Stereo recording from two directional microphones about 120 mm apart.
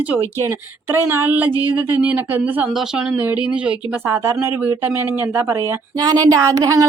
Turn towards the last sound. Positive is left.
turn(degrees=-25)  # may be behind; listen again after turning